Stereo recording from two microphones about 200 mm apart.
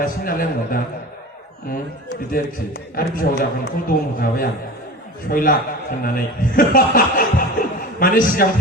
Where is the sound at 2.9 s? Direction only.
45° left (ahead or behind).